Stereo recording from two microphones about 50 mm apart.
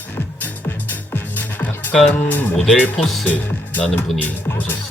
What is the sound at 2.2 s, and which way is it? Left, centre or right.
Speech, left.